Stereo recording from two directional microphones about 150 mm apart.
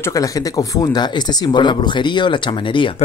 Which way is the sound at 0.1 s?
25° left (ahead or behind).